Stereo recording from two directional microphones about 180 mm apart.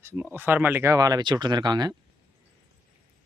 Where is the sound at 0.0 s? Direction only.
10° right (ahead or behind).